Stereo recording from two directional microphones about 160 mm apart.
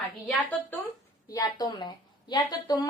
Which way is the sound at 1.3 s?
25° left (ahead or behind).